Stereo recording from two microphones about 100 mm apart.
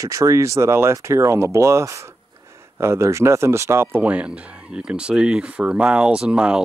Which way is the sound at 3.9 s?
15° right (ahead or behind).